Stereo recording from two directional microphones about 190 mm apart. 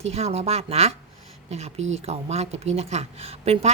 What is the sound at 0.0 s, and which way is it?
A woman's voice, 35° right (ahead or behind).